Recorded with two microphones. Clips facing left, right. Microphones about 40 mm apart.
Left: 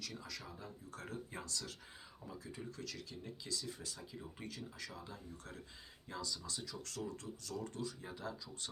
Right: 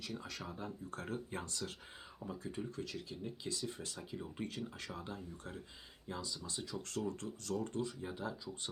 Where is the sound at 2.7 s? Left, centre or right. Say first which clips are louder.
Right 4 dB; right.